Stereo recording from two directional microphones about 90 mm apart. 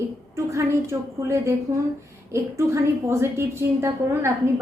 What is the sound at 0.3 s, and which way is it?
A woman's voice, 30° right (ahead or behind).